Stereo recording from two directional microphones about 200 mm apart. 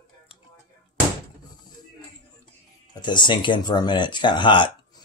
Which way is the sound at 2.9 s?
20° left (ahead or behind).